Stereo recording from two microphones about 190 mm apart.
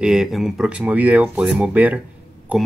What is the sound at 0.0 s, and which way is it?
Speech, 5° right (ahead or behind).